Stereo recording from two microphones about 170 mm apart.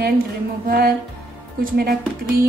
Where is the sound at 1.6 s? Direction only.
60° right (ahead or behind).